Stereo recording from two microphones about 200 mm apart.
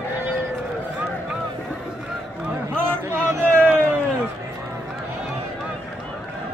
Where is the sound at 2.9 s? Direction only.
10° right (ahead or behind).